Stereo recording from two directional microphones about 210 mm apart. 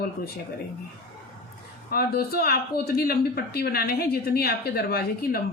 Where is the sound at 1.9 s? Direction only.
45° left (ahead or behind).